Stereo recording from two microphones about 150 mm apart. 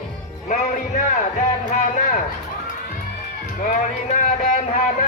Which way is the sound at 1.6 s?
60° left (ahead or behind).